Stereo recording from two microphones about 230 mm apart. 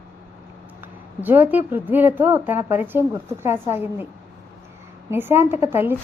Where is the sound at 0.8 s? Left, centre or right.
Centre.